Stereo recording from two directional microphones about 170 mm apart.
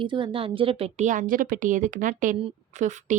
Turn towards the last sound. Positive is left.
turn(degrees=-45)  # may be behind; listen again after turning